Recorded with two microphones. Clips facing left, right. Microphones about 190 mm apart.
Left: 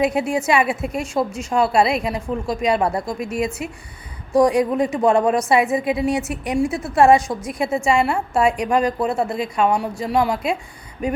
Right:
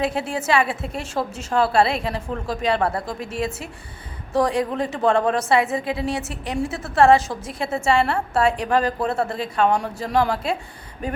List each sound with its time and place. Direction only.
0.0 s a woman's voice: 15° left (ahead or behind)
4.3 s a woman's voice: 15° left (ahead or behind)